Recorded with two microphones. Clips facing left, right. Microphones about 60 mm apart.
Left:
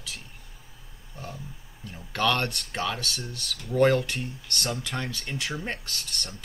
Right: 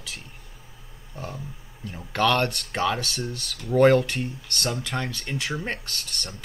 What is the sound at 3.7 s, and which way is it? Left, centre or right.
Speech, right.